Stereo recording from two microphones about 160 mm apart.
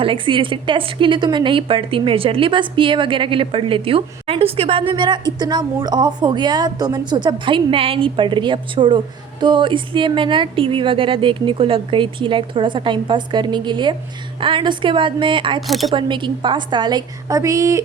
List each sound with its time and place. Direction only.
0.0 s a woman's voice: 30° right (ahead or behind)
15.6 s speech: centre (ahead or behind)
15.9 s a woman's voice: 30° right (ahead or behind)